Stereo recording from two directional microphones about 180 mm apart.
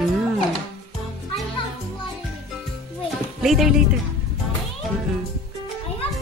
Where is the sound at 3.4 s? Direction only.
Centre (ahead or behind).